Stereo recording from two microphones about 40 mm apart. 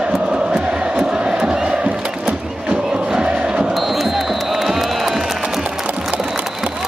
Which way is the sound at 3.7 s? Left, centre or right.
Centre.